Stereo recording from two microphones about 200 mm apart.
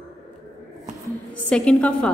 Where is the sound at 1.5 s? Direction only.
5° left (ahead or behind).